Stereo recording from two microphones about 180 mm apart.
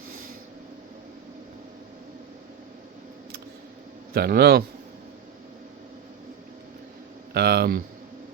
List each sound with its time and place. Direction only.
4.1 s a man's voice: 60° right (ahead or behind)
7.3 s a man's voice: 60° right (ahead or behind)